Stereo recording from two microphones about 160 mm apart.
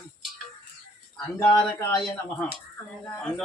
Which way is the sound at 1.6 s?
20° left (ahead or behind).